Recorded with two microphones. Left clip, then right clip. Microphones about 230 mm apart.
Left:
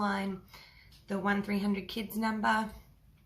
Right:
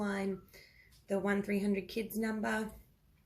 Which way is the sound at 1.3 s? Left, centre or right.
Centre.